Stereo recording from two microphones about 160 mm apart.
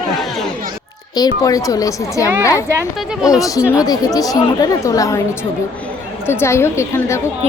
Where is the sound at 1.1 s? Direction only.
25° left (ahead or behind).